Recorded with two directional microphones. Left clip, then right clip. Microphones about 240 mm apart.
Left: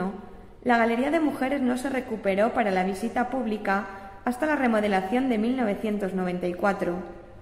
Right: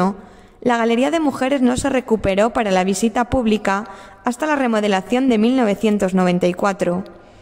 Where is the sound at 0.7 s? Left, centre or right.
Right.